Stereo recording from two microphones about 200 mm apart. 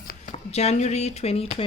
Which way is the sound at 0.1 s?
35° left (ahead or behind).